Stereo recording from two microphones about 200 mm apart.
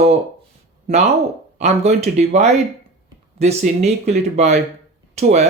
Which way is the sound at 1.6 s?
35° right (ahead or behind).